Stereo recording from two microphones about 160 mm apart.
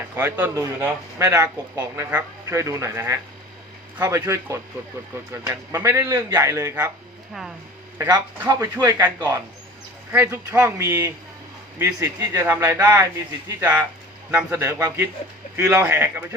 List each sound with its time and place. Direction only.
0.2 s a man's voice: 10° right (ahead or behind)
7.9 s a man's voice: 20° right (ahead or behind)